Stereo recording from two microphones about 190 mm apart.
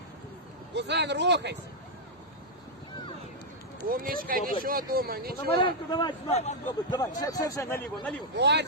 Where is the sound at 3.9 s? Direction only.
50° right (ahead or behind).